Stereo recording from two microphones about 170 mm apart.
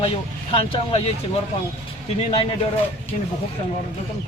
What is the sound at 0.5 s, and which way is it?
Speech, 30° left (ahead or behind).